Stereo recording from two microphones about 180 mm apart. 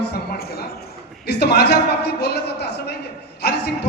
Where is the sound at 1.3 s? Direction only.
60° left (ahead or behind).